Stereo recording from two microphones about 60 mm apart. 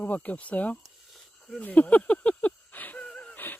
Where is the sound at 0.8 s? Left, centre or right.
Centre.